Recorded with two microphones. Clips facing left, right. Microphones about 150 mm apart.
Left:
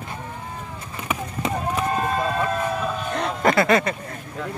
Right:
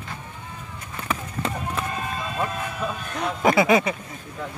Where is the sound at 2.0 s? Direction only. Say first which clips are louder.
Left 7 dB; 50° left (ahead or behind).